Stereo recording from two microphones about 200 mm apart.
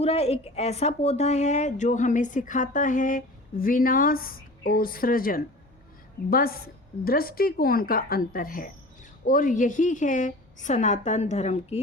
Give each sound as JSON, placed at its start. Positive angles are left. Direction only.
{"t": 0.0, "sound": "a woman's voice", "side_deg": 30}